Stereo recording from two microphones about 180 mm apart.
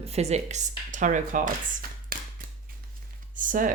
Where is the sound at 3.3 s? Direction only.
45° right (ahead or behind).